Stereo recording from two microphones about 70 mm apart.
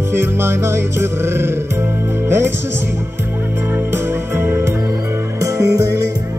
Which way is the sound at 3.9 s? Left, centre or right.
Right.